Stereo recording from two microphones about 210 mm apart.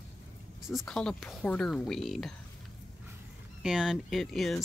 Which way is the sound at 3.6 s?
5° right (ahead or behind).